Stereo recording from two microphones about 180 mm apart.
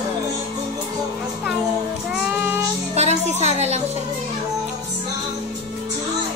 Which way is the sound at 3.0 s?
35° right (ahead or behind).